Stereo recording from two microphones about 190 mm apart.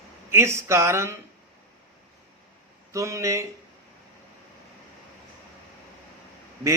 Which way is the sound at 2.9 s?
15° right (ahead or behind).